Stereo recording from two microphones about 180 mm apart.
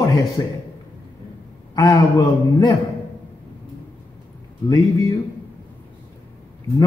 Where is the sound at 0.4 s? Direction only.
20° left (ahead or behind).